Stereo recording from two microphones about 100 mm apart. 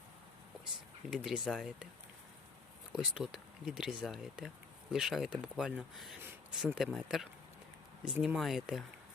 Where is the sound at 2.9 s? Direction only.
5° right (ahead or behind).